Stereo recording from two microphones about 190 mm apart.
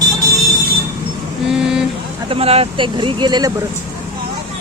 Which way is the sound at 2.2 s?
30° right (ahead or behind).